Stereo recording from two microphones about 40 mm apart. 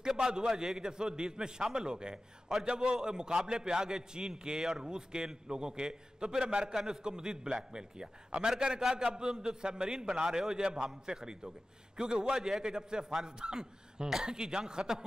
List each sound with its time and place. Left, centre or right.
0.0 s a man's voice: centre